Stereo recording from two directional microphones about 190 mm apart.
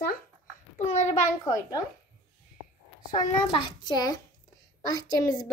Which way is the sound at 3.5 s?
25° left (ahead or behind).